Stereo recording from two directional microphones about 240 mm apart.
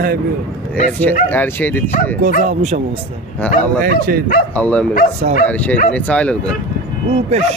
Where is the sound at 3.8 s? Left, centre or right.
Right.